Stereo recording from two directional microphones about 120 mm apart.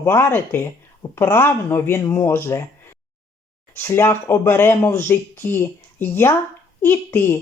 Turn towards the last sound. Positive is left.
turn(degrees=20)  # may be behind; listen again after turning